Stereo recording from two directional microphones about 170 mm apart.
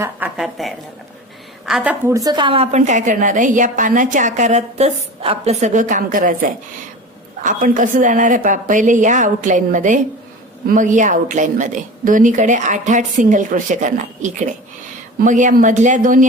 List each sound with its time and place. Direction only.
0.0 s a woman's voice: 5° right (ahead or behind)
2.1 s a woman's voice: 25° right (ahead or behind); by 6.3 s 50° right (ahead or behind)
7.4 s a woman's voice: 50° right (ahead or behind)